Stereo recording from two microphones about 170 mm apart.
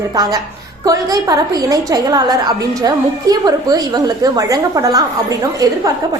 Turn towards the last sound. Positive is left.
turn(degrees=-20)  # may be behind; listen again after turning